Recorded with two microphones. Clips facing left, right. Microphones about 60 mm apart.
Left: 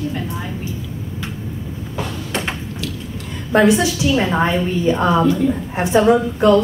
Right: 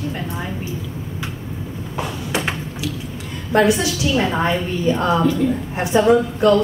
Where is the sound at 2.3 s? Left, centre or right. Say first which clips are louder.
Right 2 dB; centre.